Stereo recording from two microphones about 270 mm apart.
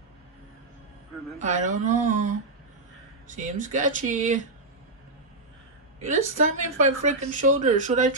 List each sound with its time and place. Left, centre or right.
1.4 s a woman's voice: right
5.9 s a woman's voice: right